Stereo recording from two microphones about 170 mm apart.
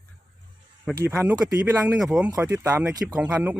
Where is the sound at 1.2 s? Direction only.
10° right (ahead or behind).